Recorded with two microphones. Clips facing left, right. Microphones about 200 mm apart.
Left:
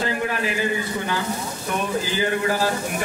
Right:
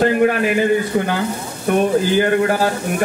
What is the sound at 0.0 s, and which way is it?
A man's voice, 55° right (ahead or behind).